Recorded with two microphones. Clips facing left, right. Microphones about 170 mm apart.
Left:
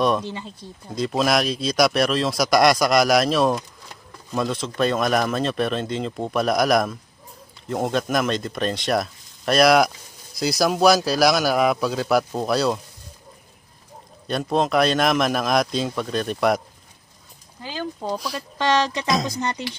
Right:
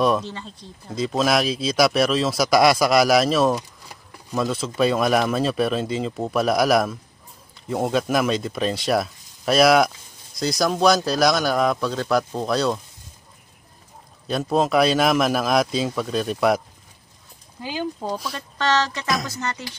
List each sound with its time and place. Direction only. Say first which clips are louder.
0.2 s speech: left 2 dB; 10° left (ahead or behind)
0.9 s speech: even; centre (ahead or behind)
14.2 s speech: right 1 dB; 5° right (ahead or behind)
17.6 s speech: right 2 dB; 10° right (ahead or behind)
18.6 s speech: left 1 dB; 15° left (ahead or behind)